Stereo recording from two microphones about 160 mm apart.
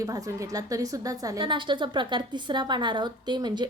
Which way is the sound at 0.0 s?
20° right (ahead or behind).